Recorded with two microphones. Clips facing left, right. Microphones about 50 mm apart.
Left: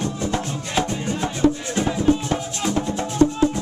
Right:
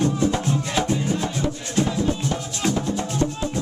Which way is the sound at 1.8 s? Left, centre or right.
Left.